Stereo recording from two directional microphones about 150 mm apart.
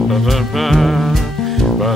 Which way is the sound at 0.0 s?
Centre (ahead or behind).